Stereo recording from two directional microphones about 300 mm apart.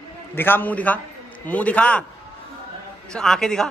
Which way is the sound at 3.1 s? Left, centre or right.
Centre.